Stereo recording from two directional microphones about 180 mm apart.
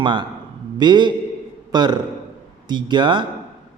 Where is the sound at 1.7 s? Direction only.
25° right (ahead or behind).